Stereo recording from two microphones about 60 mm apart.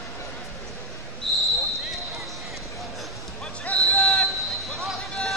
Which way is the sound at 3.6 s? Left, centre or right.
Left.